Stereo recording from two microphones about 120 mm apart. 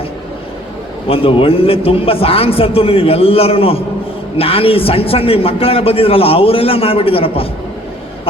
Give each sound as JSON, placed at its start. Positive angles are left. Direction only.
{"t": 1.0, "sound": "a man's voice", "side_deg": 50}